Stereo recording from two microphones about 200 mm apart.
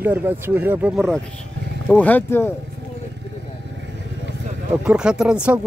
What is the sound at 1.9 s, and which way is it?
Speech, 10° left (ahead or behind).